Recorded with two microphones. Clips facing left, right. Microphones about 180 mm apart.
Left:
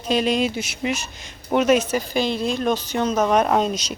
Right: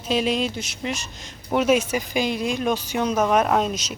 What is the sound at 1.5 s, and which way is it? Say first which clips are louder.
Speech: left 2 dB; 5° right (ahead or behind).